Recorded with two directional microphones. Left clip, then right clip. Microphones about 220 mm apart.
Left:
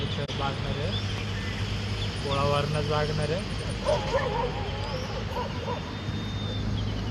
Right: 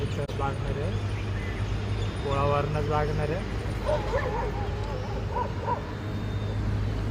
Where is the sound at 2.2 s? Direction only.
20° right (ahead or behind).